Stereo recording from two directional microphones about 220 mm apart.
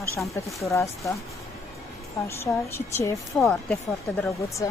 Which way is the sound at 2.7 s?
10° left (ahead or behind).